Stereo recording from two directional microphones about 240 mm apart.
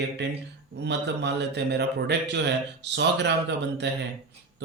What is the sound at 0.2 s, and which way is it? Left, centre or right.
A man's voice, right.